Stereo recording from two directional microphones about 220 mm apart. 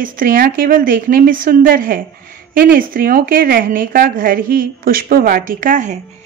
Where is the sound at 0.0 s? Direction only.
40° right (ahead or behind).